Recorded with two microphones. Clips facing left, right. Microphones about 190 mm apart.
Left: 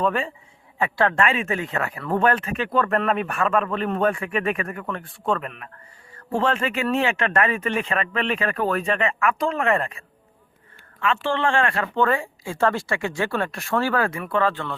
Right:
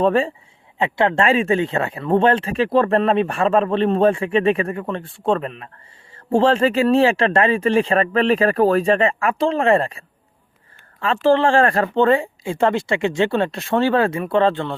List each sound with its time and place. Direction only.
0.0 s speech: 35° right (ahead or behind)
0.8 s speech: 20° right (ahead or behind)
11.0 s speech: 35° right (ahead or behind)
11.9 s speech: 25° right (ahead or behind)